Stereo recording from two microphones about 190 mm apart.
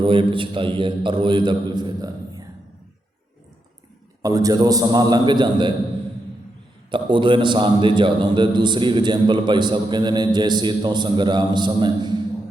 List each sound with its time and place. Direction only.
0.0 s a man's voice: 25° right (ahead or behind)
4.2 s a man's voice: 20° right (ahead or behind)
6.9 s a man's voice: 25° right (ahead or behind)